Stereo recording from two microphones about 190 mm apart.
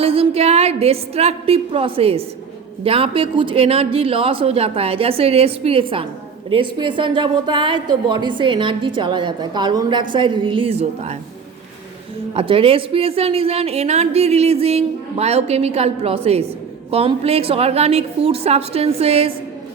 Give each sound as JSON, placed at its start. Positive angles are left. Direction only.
{"t": 0.0, "sound": "a woman's voice", "side_deg": -30}
{"t": 12.3, "sound": "speech", "side_deg": -30}